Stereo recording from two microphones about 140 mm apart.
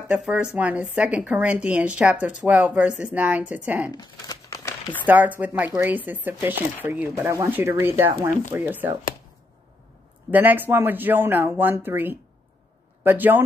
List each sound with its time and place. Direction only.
0.1 s a woman's voice: 5° right (ahead or behind)
3.9 s crumpling: 25° left (ahead or behind)
5.0 s a woman's voice: 10° right (ahead or behind)
10.3 s a woman's voice: 15° right (ahead or behind)